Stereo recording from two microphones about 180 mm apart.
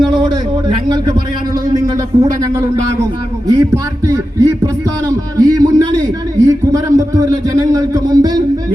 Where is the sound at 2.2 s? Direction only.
20° right (ahead or behind).